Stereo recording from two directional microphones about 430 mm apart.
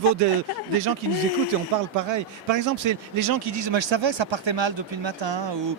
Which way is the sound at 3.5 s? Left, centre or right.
Right.